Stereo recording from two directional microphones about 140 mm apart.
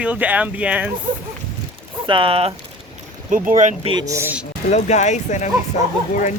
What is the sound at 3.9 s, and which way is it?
Speech, 25° right (ahead or behind).